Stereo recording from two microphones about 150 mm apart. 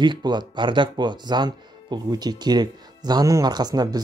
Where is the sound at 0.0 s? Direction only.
30° right (ahead or behind).